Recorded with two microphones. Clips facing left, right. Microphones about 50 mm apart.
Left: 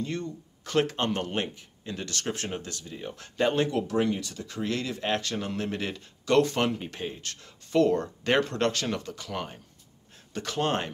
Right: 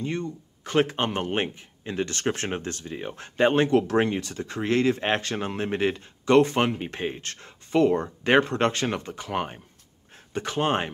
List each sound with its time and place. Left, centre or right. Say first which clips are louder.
0.0 s speech: right 3 dB; right